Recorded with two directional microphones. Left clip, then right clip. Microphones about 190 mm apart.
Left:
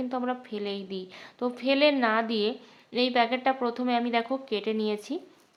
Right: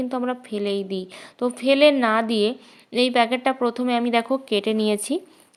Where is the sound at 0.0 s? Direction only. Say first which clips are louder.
Right 5 dB; 30° right (ahead or behind).